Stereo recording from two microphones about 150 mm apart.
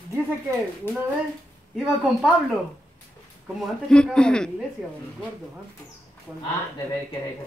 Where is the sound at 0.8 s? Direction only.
15° left (ahead or behind).